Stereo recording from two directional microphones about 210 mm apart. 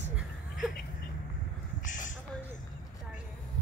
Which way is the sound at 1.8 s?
40° left (ahead or behind).